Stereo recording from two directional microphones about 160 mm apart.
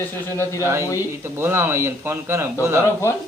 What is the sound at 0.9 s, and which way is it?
Speech, 15° right (ahead or behind).